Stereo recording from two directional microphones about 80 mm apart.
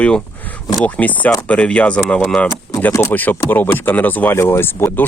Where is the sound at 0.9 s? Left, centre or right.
Centre.